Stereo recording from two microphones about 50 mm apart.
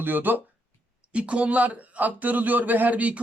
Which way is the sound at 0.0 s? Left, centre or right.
Right.